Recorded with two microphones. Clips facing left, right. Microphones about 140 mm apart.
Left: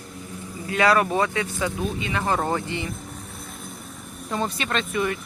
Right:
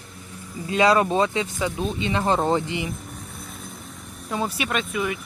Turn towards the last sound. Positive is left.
turn(degrees=-5)  # may be behind; listen again after turning